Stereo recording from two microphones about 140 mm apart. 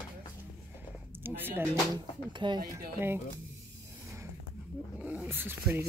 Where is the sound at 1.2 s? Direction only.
15° right (ahead or behind).